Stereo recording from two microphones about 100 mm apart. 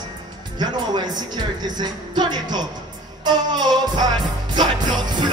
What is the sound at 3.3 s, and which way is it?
Music, 45° right (ahead or behind).